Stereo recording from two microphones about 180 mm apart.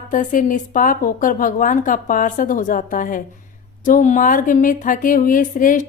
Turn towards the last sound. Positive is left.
turn(degrees=45)  # may be behind; listen again after turning